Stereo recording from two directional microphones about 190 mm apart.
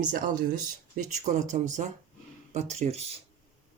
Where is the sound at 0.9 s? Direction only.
40° right (ahead or behind).